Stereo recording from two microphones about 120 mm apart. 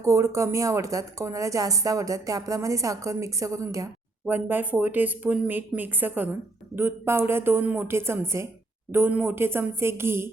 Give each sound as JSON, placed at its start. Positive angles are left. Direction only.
{"t": 0.0, "sound": "a woman's voice", "side_deg": -25}
{"t": 4.3, "sound": "a woman's voice", "side_deg": -15}